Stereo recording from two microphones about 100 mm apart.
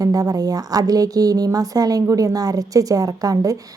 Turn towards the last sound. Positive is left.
turn(degrees=-35)  # may be behind; listen again after turning